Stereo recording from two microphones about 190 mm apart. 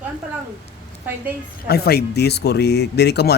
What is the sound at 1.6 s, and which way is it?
Speech, 55° left (ahead or behind).